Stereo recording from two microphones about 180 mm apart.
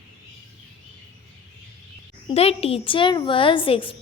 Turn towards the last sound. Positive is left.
turn(degrees=30)  # may be behind; listen again after turning